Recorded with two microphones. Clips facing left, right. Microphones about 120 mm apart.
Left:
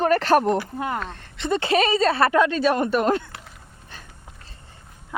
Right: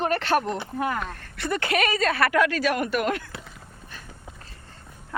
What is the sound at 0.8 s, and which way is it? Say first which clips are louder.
Speech: even; 25° left (ahead or behind).